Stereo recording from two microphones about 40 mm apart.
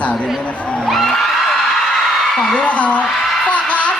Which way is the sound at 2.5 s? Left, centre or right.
Left.